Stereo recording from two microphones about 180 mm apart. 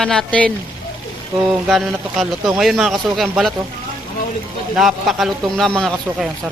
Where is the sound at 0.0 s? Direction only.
5° left (ahead or behind).